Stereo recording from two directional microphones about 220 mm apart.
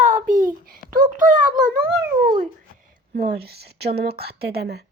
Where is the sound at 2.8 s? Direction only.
40° right (ahead or behind).